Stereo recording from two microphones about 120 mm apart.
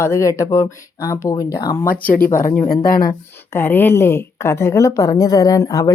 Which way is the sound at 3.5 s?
20° left (ahead or behind).